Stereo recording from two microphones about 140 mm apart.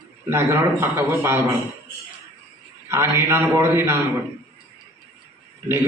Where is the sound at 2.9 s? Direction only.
20° right (ahead or behind).